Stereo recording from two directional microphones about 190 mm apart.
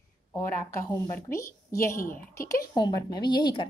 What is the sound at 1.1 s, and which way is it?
A woman's voice, 15° left (ahead or behind).